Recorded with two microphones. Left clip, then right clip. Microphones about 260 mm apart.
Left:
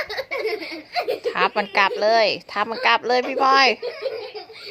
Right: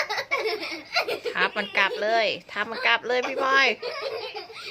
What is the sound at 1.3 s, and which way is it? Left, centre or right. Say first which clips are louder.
Speech: left 5 dB; centre.